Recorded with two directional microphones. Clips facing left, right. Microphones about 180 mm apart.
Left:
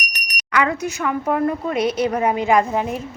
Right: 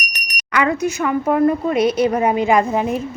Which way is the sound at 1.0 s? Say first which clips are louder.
Right 4 dB; 20° right (ahead or behind).